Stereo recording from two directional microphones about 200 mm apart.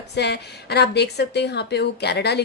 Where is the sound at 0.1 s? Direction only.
55° left (ahead or behind).